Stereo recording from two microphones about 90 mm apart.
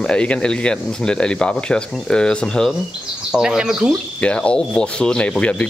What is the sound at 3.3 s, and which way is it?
Speech, 10° right (ahead or behind).